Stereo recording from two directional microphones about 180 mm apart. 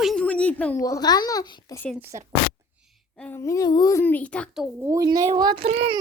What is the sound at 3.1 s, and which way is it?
A child's voice, 10° left (ahead or behind).